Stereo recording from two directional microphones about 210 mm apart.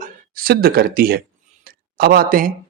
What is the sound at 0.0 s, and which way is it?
Speech, 45° right (ahead or behind).